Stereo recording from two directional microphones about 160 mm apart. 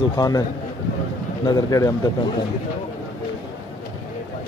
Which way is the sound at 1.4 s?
20° left (ahead or behind).